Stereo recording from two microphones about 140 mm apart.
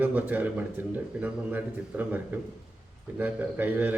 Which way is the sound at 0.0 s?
10° right (ahead or behind).